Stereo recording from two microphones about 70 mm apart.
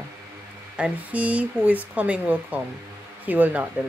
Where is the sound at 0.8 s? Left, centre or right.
Centre.